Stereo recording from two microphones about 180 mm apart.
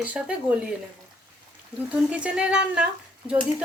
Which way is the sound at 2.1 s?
5° right (ahead or behind).